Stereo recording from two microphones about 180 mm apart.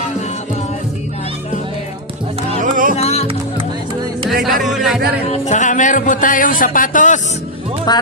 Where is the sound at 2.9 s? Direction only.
35° left (ahead or behind).